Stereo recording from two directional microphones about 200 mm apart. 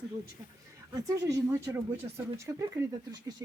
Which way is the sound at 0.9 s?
15° right (ahead or behind).